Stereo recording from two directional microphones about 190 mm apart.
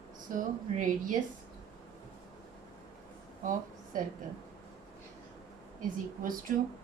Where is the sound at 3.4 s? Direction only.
45° right (ahead or behind).